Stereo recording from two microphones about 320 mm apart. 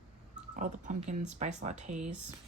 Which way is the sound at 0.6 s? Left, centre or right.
Right.